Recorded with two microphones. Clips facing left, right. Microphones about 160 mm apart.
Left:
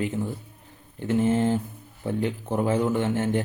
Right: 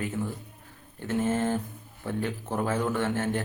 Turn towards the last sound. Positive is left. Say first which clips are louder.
# left 4 dB
turn(degrees=15)  # may be behind; listen again after turning